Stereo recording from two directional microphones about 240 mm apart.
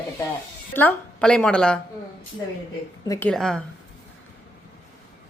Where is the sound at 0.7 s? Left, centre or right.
Centre.